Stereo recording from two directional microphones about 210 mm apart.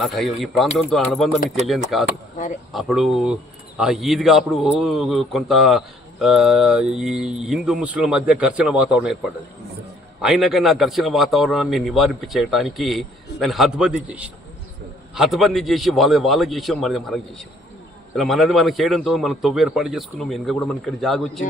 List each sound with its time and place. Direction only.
0.0 s a man's voice: centre (ahead or behind)
10.2 s a man's voice: centre (ahead or behind)